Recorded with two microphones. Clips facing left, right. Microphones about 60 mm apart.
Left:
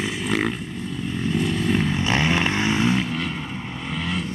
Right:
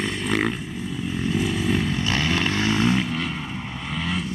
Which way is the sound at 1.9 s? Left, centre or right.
Left.